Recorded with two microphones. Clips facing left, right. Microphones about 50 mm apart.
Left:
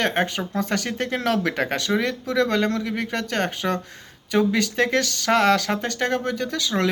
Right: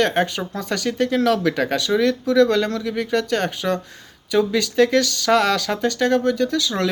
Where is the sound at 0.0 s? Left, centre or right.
Left.